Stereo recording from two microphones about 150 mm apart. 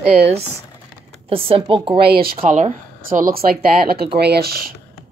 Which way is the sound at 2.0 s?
90° right.